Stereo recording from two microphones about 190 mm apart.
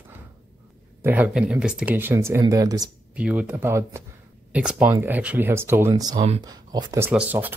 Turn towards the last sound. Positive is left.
turn(degrees=-10)  # may be behind; listen again after turning